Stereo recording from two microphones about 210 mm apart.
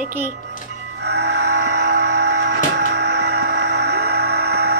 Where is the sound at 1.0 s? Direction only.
55° right (ahead or behind).